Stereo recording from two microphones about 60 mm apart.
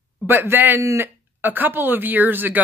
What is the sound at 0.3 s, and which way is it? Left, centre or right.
Speech, right.